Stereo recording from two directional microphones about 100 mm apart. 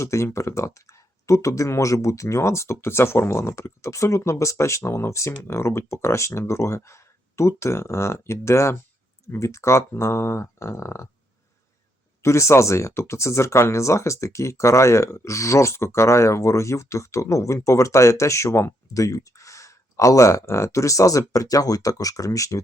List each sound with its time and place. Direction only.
0.0 s speech: 30° left (ahead or behind)
12.2 s speech: 30° left (ahead or behind)